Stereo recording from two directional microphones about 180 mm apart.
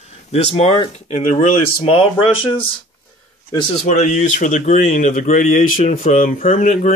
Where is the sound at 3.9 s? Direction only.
40° left (ahead or behind).